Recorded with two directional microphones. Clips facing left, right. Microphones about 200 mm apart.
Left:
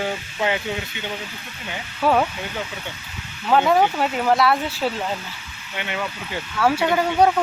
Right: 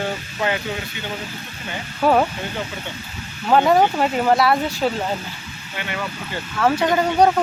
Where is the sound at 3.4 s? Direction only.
5° right (ahead or behind).